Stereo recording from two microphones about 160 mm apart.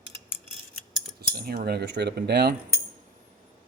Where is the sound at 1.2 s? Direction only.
70° right (ahead or behind); by 2.5 s 90° right.